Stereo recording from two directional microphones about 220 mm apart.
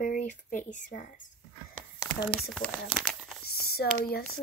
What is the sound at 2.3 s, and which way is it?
Speech, 5° left (ahead or behind).